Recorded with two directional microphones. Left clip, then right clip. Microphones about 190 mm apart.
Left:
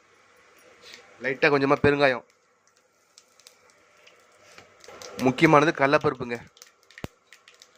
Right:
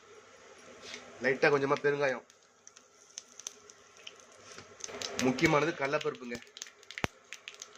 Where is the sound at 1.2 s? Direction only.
20° left (ahead or behind).